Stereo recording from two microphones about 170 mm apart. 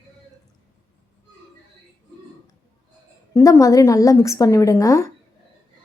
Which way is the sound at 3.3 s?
15° left (ahead or behind).